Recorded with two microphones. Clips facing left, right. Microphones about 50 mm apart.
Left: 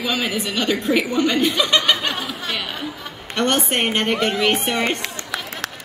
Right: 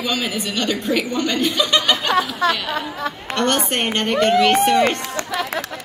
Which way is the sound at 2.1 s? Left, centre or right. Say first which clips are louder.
Right 8 dB; right.